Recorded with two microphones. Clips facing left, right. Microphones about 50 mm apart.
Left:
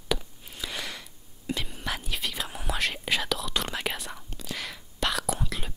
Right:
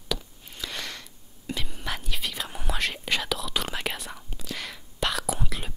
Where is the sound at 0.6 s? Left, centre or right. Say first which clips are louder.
Even; centre.